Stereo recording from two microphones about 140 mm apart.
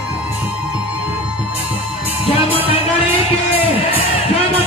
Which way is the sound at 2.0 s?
45° left (ahead or behind).